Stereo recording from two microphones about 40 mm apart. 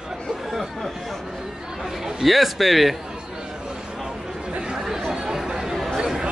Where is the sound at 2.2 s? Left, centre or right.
Centre.